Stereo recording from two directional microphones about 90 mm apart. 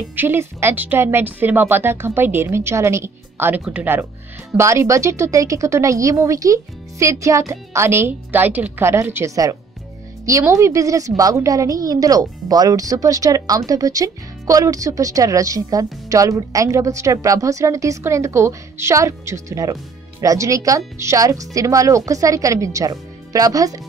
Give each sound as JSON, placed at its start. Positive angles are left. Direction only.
{"t": 0.1, "sound": "a woman's voice", "side_deg": -25}